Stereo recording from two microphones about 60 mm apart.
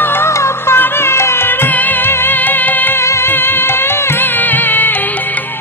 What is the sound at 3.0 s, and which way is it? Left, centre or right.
Music, left.